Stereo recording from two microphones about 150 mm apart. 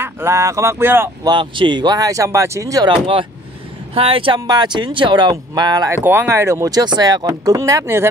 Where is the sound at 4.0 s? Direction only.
40° right (ahead or behind).